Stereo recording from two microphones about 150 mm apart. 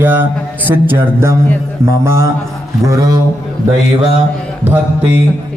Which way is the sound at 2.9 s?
25° right (ahead or behind).